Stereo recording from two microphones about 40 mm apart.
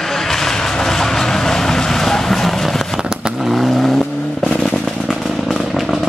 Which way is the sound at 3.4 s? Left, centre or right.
Centre.